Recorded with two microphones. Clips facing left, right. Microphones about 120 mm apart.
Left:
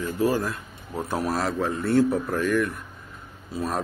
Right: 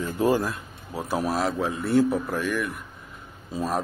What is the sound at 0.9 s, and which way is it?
A man's voice, 5° right (ahead or behind).